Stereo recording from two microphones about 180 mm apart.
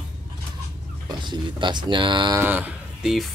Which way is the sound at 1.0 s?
25° right (ahead or behind).